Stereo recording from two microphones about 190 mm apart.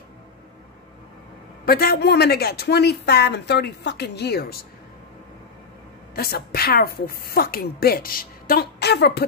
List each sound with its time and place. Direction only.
1.7 s speech: 55° left (ahead or behind)
6.1 s a woman's voice: 55° left (ahead or behind)